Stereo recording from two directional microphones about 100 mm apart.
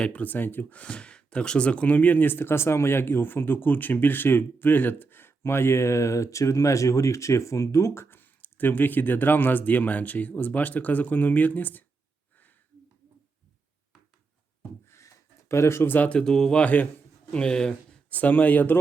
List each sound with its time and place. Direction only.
0.0 s speech: 15° left (ahead or behind)
14.8 s speech: 30° left (ahead or behind)